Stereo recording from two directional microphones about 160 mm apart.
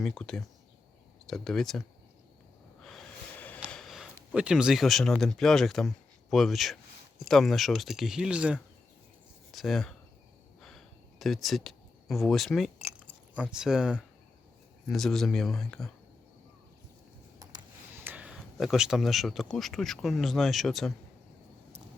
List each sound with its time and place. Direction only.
0.0 s speech: 5° left (ahead or behind)
2.8 s snort: 5° left (ahead or behind)
3.7 s speech: centre (ahead or behind)
10.6 s a sound: centre (ahead or behind)
12.8 s keys jangling: 10° right (ahead or behind)
14.8 s speech: centre (ahead or behind)
17.4 s a sound: 25° right (ahead or behind)
17.9 s a sound: 10° right (ahead or behind)
18.5 s speech: centre (ahead or behind)